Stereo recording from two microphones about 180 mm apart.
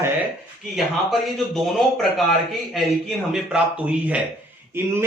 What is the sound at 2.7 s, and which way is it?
Speech, centre (ahead or behind).